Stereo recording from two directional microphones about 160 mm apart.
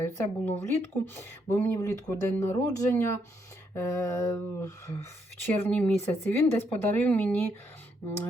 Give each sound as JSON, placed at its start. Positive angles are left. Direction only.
{"t": 0.0, "sound": "speech", "side_deg": 15}
{"t": 3.8, "sound": "a sound", "side_deg": 20}
{"t": 5.5, "sound": "speech", "side_deg": 10}